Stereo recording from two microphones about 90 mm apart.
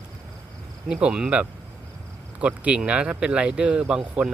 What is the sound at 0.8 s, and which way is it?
Speech, 10° right (ahead or behind).